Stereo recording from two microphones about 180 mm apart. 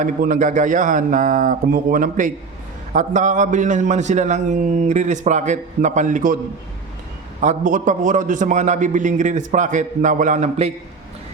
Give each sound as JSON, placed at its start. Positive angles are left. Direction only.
{"t": 0.0, "sound": "a man's voice", "side_deg": -45}
{"t": 7.4, "sound": "a man's voice", "side_deg": -45}